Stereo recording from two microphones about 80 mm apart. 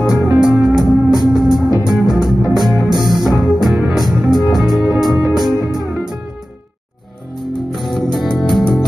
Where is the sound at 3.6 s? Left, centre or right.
Centre.